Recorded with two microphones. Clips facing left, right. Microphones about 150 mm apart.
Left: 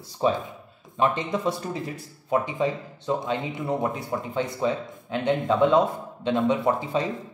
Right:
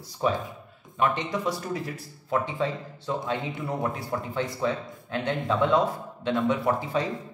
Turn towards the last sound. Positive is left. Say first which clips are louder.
# left 2 dB
turn(degrees=20)  # may be behind; listen again after turning